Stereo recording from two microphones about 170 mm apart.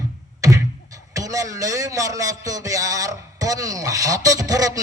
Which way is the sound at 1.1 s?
20° right (ahead or behind).